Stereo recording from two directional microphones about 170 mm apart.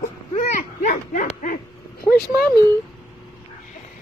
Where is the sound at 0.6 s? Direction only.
50° left (ahead or behind).